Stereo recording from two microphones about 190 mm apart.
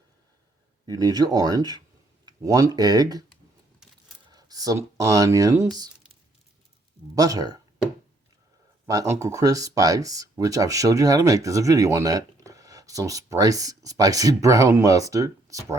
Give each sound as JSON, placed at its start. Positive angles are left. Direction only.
{"t": 0.9, "sound": "speech", "side_deg": -20}
{"t": 4.3, "sound": "speech", "side_deg": -20}
{"t": 7.2, "sound": "speech", "side_deg": -20}
{"t": 8.9, "sound": "speech", "side_deg": -15}